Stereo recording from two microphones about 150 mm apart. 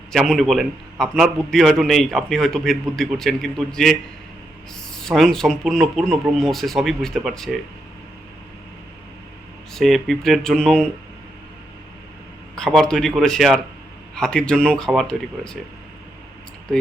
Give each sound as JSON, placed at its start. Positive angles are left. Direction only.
{"t": 0.1, "sound": "a man's voice", "side_deg": 0}
{"t": 9.7, "sound": "a man's voice", "side_deg": 0}
{"t": 12.5, "sound": "a man's voice", "side_deg": 5}